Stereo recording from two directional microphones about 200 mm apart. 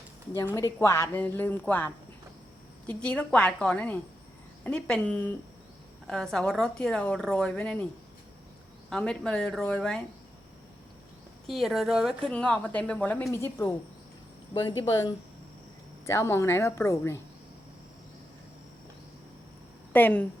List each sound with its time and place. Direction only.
0.5 s a woman's voice: 15° left (ahead or behind)
8.9 s a woman's voice: 5° left (ahead or behind)
11.4 s a woman's voice: centre (ahead or behind)
14.5 s a woman's voice: 20° left (ahead or behind)
19.9 s speech: 10° left (ahead or behind)